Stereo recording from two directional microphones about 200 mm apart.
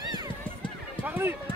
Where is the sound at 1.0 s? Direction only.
10° right (ahead or behind).